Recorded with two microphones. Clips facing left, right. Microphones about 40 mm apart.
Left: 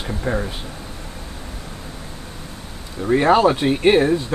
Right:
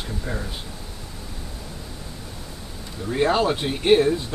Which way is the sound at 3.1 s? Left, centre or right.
Left.